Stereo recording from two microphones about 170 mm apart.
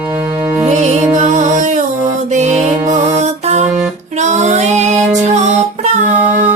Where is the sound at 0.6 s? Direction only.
40° right (ahead or behind).